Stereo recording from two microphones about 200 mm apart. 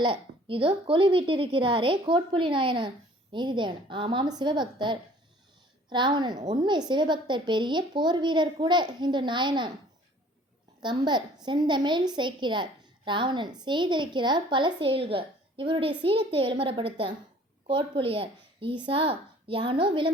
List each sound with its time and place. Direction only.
0.0 s a woman's voice: 25° right (ahead or behind)
10.8 s a woman's voice: 20° right (ahead or behind)